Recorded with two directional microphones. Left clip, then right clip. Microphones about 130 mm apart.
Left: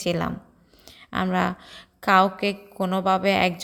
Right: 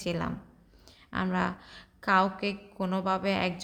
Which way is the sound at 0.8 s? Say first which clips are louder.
Left 6 dB; 45° left (ahead or behind).